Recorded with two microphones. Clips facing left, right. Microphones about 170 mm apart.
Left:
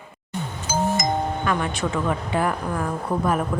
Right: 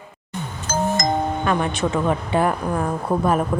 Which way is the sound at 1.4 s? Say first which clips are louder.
Right 3 dB; 25° right (ahead or behind).